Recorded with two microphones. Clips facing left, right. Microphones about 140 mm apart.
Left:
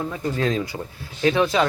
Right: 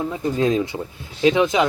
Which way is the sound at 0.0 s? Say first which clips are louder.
Right 3 dB; 20° right (ahead or behind).